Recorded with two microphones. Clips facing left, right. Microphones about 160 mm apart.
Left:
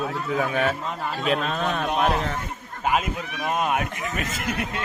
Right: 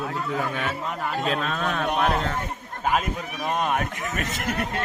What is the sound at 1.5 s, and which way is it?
Speech, 20° left (ahead or behind).